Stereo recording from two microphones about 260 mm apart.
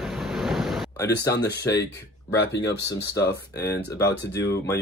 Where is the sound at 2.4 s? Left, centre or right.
Left.